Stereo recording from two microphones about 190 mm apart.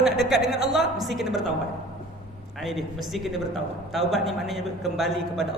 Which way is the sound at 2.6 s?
Centre (ahead or behind).